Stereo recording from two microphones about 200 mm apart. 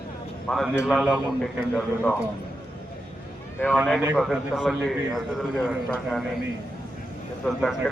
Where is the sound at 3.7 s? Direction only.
5° right (ahead or behind).